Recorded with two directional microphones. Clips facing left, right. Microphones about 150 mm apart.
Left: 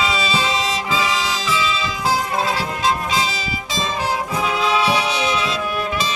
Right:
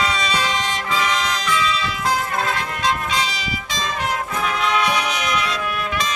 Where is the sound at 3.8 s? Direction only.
30° left (ahead or behind).